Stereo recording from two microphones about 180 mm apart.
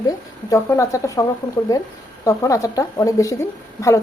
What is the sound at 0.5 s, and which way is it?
A woman's voice, 15° left (ahead or behind).